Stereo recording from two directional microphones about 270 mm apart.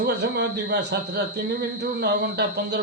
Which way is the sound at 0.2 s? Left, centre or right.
Right.